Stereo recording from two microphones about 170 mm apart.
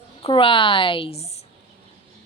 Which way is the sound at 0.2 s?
30° left (ahead or behind).